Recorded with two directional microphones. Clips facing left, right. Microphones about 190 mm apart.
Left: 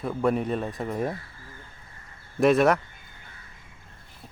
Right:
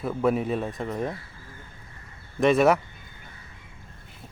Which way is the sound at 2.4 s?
Centre (ahead or behind).